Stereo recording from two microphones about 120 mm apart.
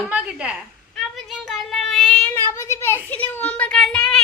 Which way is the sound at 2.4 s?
20° left (ahead or behind).